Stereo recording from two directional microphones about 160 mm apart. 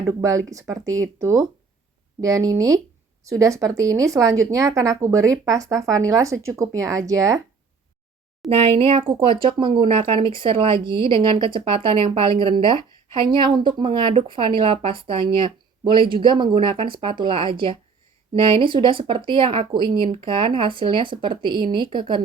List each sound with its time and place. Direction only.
0.0 s a woman's voice: 20° right (ahead or behind)
8.4 s speech: 35° right (ahead or behind)